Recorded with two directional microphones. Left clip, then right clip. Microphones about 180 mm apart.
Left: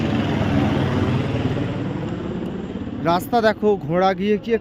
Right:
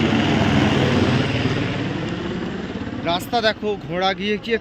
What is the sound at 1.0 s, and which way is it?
Vehicle, 15° left (ahead or behind).